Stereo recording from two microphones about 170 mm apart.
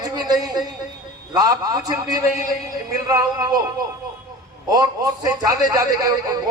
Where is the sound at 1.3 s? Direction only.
20° right (ahead or behind).